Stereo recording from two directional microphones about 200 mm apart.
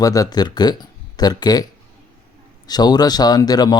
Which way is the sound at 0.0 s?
15° left (ahead or behind).